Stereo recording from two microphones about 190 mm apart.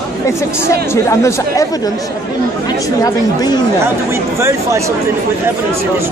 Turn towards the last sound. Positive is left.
turn(degrees=-15)  # may be behind; listen again after turning